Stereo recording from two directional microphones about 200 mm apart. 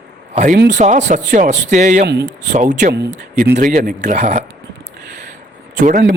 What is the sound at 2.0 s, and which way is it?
Speech, 55° right (ahead or behind).